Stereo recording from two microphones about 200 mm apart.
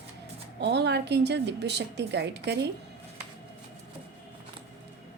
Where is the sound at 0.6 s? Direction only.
55° right (ahead or behind).